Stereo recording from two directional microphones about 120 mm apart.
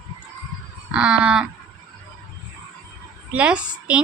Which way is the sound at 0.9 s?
10° right (ahead or behind).